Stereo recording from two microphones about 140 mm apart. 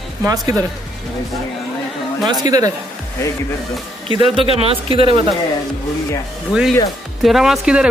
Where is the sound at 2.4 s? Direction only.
25° right (ahead or behind).